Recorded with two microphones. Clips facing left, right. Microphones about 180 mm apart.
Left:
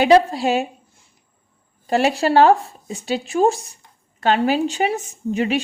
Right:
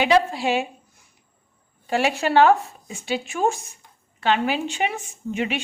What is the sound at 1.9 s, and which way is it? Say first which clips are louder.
A woman's voice: left 4 dB; 40° left (ahead or behind).